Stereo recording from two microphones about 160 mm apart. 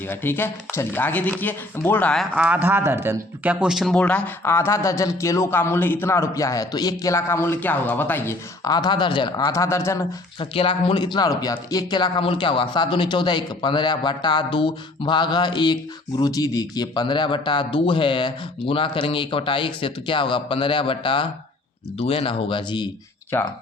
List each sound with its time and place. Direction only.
0.1 s speech: 15° left (ahead or behind)
2.3 s speech: 10° right (ahead or behind); by 9.5 s 30° left (ahead or behind)
9.5 s speech: 15° left (ahead or behind)
10.4 s speech: 35° left (ahead or behind)